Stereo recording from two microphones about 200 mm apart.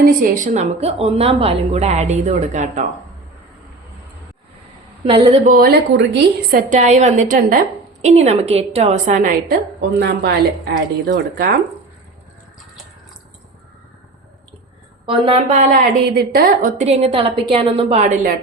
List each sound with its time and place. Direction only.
0.0 s a woman's voice: 45° right (ahead or behind)
5.0 s a woman's voice: 30° right (ahead or behind)
5.5 s a woman's voice: 50° right (ahead or behind); by 9.1 s 30° right (ahead or behind)
9.1 s a woman's voice: 45° right (ahead or behind)
15.0 s a woman's voice: 25° right (ahead or behind)